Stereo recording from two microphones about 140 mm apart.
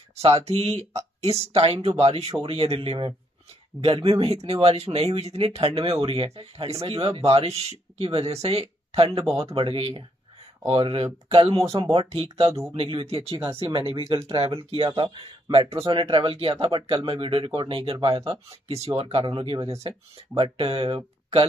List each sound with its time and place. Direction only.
0.1 s speech: 50° right (ahead or behind)